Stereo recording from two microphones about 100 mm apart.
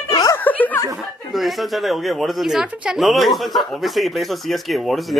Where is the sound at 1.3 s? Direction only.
Centre (ahead or behind).